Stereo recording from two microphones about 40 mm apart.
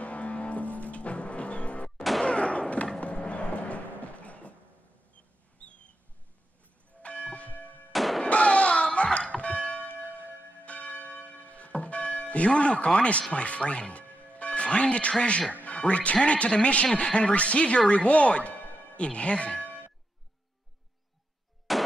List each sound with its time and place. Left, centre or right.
0.0 s music: left
2.2 s a sound: left
3.0 s music: left
7.0 s church bell: left
7.9 s a sound: centre
8.3 s church bell: left
13.3 s music: left
15.6 s a man's voice: left
21.7 s a sound: centre